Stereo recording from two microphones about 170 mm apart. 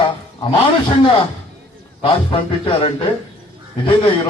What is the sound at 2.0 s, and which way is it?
A man's voice, 30° left (ahead or behind).